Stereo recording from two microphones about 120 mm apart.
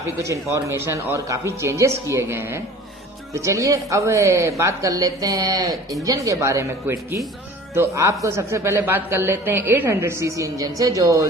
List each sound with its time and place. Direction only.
0.2 s speech: 25° right (ahead or behind)